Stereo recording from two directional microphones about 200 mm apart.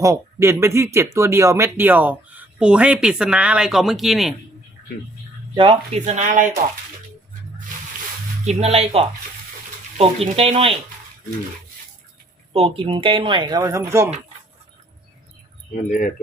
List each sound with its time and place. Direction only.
0.0 s speech: 15° right (ahead or behind)
5.5 s speech: 25° right (ahead or behind)
6.1 s speech: 40° right (ahead or behind)
8.4 s speech: 30° right (ahead or behind)
12.5 s speech: 30° right (ahead or behind)
15.7 s speech: 40° left (ahead or behind)